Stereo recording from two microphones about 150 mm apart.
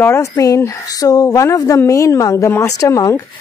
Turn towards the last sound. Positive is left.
turn(degrees=20)  # may be behind; listen again after turning